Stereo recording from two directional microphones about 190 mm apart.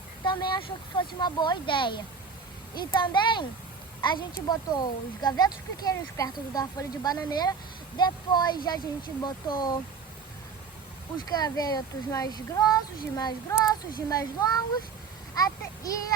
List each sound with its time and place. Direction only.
0.3 s speech: 25° left (ahead or behind)
11.3 s a child's voice: 20° left (ahead or behind)